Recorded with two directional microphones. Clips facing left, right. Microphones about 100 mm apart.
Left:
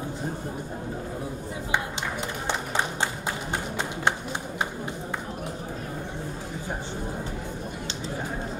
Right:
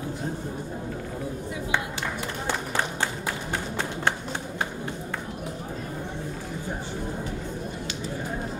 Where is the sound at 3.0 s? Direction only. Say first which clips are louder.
Even; 20° left (ahead or behind).